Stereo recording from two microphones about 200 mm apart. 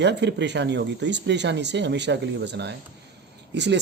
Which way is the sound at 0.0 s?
60° right (ahead or behind).